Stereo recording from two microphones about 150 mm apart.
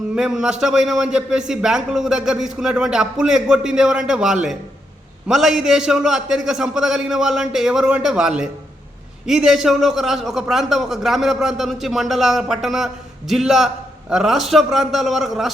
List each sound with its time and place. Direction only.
0.2 s a man's voice: 5° right (ahead or behind)